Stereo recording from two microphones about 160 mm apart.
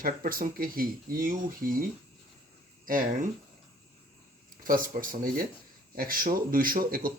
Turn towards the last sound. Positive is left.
turn(degrees=-65)  # may be behind; listen again after turning